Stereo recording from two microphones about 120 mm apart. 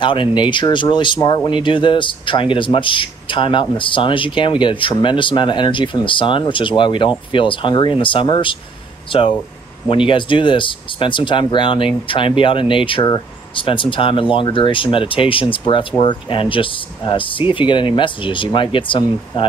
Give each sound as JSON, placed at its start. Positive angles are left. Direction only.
{"t": 0.0, "sound": "speech", "side_deg": 45}
{"t": 9.8, "sound": "speech", "side_deg": 45}